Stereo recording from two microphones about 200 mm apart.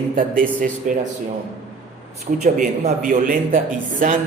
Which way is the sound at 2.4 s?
40° right (ahead or behind).